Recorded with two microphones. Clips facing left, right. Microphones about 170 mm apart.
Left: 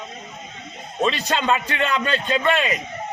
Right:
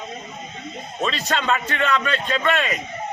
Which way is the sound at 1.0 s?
30° left (ahead or behind).